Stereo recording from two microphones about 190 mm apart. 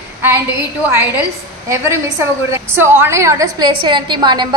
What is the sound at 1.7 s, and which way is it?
A woman's voice, 15° right (ahead or behind).